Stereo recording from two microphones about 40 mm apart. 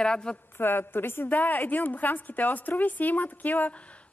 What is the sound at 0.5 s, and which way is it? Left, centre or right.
Speech, left.